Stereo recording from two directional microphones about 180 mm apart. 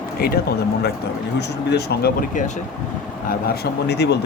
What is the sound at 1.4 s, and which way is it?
Speech, 65° left (ahead or behind).